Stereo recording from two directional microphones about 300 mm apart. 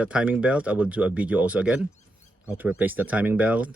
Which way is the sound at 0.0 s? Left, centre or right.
Centre.